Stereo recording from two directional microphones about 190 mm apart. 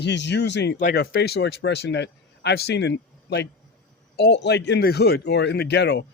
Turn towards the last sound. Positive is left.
turn(degrees=65)  # may be behind; listen again after turning